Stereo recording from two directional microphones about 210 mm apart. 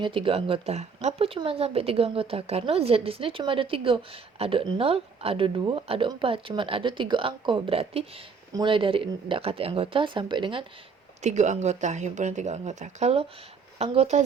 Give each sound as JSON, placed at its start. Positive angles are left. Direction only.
{"t": 0.0, "sound": "speech", "side_deg": -25}
{"t": 11.2, "sound": "speech", "side_deg": -35}